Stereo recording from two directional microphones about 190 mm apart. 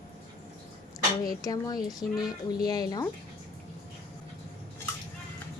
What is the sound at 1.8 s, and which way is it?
Speech, centre (ahead or behind).